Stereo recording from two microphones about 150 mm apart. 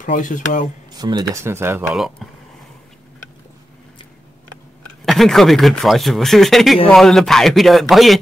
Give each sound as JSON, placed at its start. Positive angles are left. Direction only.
{"t": 0.0, "sound": "speech", "side_deg": 60}
{"t": 0.9, "sound": "speech", "side_deg": -25}
{"t": 1.4, "sound": "speech", "side_deg": -15}
{"t": 1.9, "sound": "speech", "side_deg": 0}
{"t": 5.0, "sound": "speech", "side_deg": 0}